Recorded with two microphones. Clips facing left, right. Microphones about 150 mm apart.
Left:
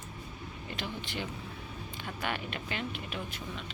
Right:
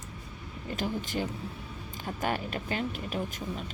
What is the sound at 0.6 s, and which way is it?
Speech, 45° right (ahead or behind).